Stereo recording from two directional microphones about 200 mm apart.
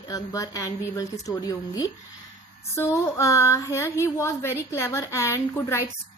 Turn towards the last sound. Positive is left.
turn(degrees=15)  # may be behind; listen again after turning